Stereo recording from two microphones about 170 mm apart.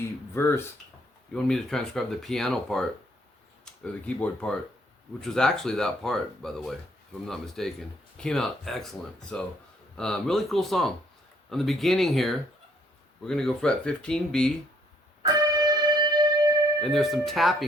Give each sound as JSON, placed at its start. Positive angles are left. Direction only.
{"t": 0.0, "sound": "a sound", "side_deg": 15}
{"t": 1.3, "sound": "speech", "side_deg": 5}
{"t": 15.2, "sound": "music", "side_deg": -25}
{"t": 16.8, "sound": "speech", "side_deg": 0}